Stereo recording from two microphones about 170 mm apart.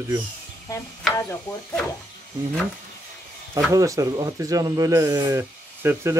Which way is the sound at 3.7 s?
20° right (ahead or behind).